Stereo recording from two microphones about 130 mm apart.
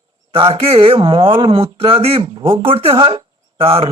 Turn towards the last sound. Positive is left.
turn(degrees=-45)  # may be behind; listen again after turning